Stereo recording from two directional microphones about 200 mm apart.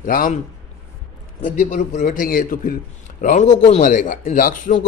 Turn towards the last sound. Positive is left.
turn(degrees=40)  # may be behind; listen again after turning